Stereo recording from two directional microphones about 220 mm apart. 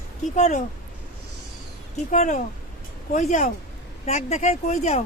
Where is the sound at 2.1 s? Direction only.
35° left (ahead or behind).